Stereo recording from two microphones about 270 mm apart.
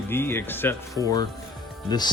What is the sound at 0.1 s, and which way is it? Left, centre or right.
Speech, centre.